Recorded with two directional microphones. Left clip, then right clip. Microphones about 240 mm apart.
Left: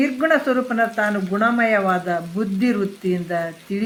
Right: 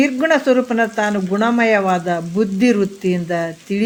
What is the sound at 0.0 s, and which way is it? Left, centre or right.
Speech, right.